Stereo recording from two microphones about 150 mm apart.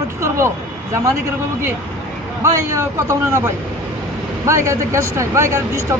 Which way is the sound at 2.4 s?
20° right (ahead or behind).